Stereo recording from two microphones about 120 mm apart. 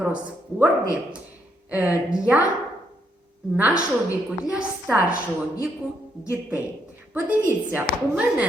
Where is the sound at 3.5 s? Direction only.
15° right (ahead or behind).